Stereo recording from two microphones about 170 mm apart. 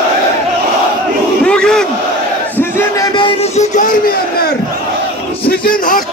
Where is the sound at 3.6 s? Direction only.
50° left (ahead or behind).